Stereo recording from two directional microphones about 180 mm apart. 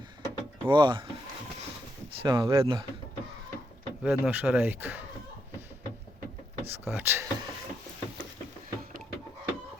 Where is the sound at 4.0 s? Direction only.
5° right (ahead or behind).